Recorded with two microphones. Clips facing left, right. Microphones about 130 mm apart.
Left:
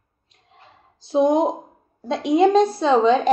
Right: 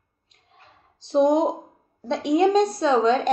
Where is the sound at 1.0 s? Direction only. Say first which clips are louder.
Left 1 dB; centre (ahead or behind).